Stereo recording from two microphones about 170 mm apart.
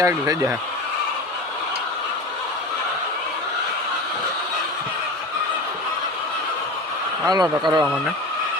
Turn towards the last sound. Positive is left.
turn(degrees=-25)  # may be behind; listen again after turning